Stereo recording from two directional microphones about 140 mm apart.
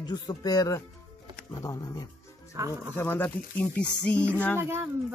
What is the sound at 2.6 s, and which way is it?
Speech, 25° right (ahead or behind).